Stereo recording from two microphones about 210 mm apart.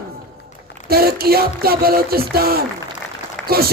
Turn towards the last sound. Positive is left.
turn(degrees=-45)  # may be behind; listen again after turning